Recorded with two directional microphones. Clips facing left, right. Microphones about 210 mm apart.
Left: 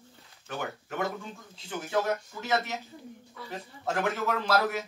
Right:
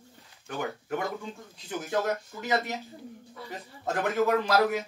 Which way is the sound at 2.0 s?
15° right (ahead or behind).